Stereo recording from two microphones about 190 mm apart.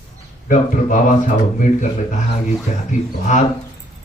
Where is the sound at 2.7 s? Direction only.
45° left (ahead or behind).